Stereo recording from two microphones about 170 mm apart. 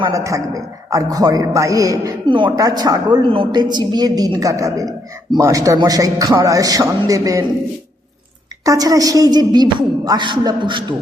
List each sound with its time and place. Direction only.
0.0 s a man's voice: 20° right (ahead or behind)
8.6 s a man's voice: 20° right (ahead or behind)